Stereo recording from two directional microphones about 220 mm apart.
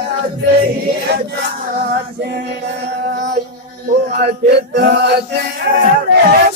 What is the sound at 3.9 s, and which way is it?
Male singing, 45° right (ahead or behind).